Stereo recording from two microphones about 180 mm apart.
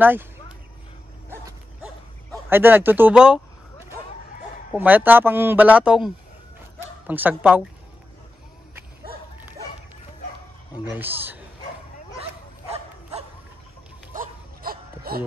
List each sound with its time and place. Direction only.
0.0 s speech: 10° right (ahead or behind)
2.5 s speech: 10° right (ahead or behind)
4.7 s speech: 10° right (ahead or behind)
11.0 s speech: 10° right (ahead or behind)
14.1 s dog: 50° right (ahead or behind)